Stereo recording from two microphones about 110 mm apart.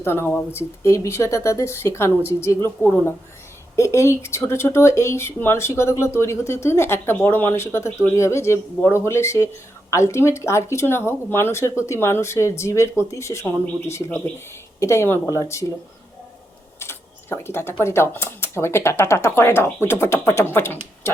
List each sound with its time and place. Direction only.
0.0 s speech: 20° left (ahead or behind)
16.8 s speech: 20° left (ahead or behind)